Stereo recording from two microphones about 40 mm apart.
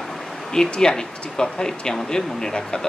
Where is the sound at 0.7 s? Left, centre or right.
Centre.